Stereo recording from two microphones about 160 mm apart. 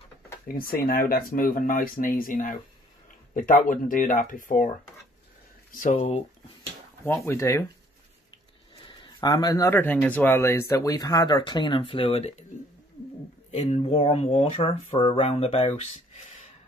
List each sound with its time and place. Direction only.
0.5 s speech: 65° left (ahead or behind)
5.7 s speech: 50° left (ahead or behind)
7.2 s speech: 15° left (ahead or behind)
8.8 s speech: 25° left (ahead or behind); by 12.4 s 40° left (ahead or behind)
13.5 s speech: 40° left (ahead or behind)